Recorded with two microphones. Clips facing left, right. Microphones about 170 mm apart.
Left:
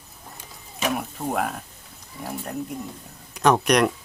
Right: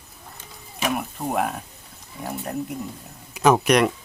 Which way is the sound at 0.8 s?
5° right (ahead or behind).